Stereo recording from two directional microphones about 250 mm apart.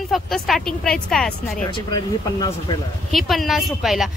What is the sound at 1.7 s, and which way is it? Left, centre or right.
Speech, centre.